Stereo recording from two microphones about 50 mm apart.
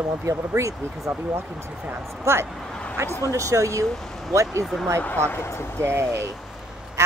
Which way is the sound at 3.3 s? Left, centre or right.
Right.